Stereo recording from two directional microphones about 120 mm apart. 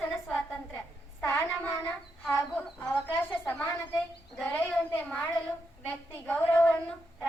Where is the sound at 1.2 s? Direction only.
25° left (ahead or behind).